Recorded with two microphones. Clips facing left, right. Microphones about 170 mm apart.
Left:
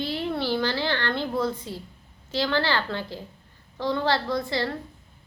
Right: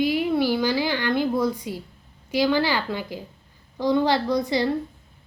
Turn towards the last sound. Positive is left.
turn(degrees=-15)  # may be behind; listen again after turning